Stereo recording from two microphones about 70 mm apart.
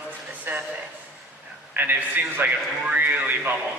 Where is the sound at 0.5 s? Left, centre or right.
Right.